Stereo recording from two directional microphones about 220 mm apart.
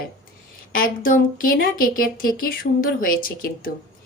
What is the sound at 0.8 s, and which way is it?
A woman's voice, 40° left (ahead or behind).